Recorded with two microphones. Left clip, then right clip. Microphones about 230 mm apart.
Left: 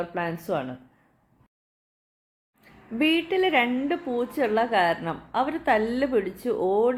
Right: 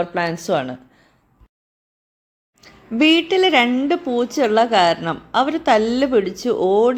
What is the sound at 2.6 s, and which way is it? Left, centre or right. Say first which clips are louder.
A woman's voice: right 8 dB; right.